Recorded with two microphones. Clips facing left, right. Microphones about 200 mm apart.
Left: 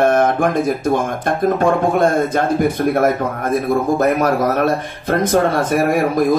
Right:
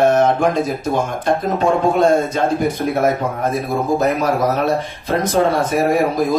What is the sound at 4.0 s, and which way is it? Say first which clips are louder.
Speech: left 2 dB; 55° left (ahead or behind).